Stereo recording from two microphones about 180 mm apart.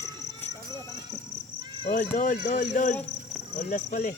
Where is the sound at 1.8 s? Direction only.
50° left (ahead or behind).